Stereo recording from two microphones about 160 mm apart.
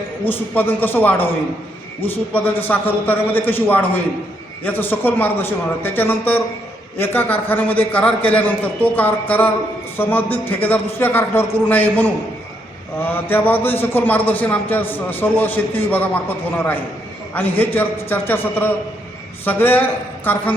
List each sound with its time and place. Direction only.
0.3 s a man's voice: 10° left (ahead or behind)
17.3 s a man's voice: 10° left (ahead or behind)